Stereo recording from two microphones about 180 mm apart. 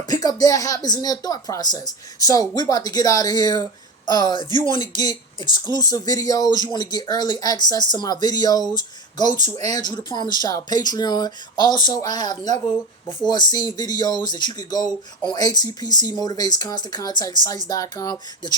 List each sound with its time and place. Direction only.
0.1 s speech: 20° left (ahead or behind)
9.2 s speech: 40° right (ahead or behind)
9.6 s speech: 20° left (ahead or behind)